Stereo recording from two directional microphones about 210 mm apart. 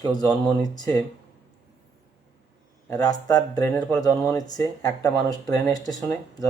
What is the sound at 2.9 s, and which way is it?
Speech, 15° left (ahead or behind).